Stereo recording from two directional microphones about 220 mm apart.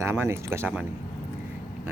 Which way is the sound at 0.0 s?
10° right (ahead or behind).